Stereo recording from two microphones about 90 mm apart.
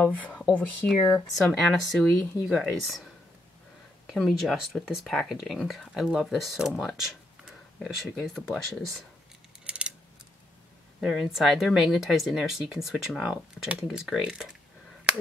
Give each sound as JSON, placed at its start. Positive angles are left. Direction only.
{"t": 0.3, "sound": "speech", "side_deg": 15}
{"t": 0.8, "sound": "speech", "side_deg": 0}
{"t": 4.1, "sound": "speech", "side_deg": 5}
{"t": 9.7, "sound": "a sound", "side_deg": -10}
{"t": 11.0, "sound": "speech", "side_deg": -5}